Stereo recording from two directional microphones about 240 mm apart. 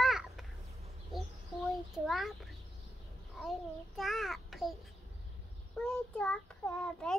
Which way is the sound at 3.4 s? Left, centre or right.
Centre.